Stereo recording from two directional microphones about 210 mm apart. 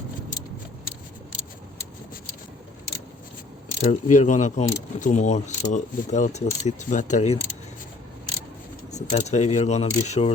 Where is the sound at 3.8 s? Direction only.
35° left (ahead or behind).